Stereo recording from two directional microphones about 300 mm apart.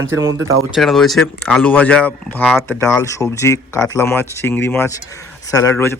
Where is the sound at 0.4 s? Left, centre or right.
Centre.